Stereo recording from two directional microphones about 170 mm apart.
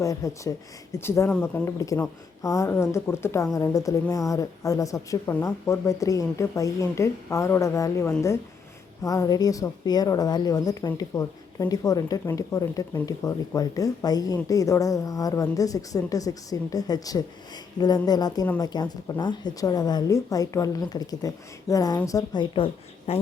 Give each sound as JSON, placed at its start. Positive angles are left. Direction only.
{"t": 0.0, "sound": "a woman's voice", "side_deg": 20}